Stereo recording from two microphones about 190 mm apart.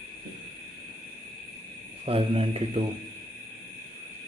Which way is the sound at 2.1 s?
30° right (ahead or behind).